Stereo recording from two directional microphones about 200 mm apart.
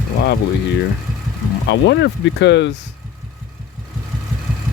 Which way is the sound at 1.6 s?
60° left (ahead or behind).